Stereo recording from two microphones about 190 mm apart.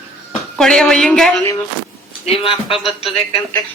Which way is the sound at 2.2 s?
30° left (ahead or behind).